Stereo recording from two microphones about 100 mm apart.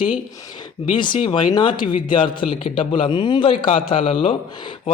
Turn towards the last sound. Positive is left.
turn(degrees=60)  # may be behind; listen again after turning